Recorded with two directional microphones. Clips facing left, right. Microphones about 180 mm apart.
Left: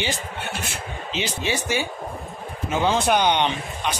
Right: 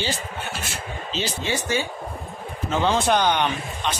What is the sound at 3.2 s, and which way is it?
Speech, 20° left (ahead or behind).